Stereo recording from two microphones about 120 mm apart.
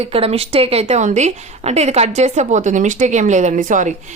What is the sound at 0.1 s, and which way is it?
A woman's voice, 55° right (ahead or behind).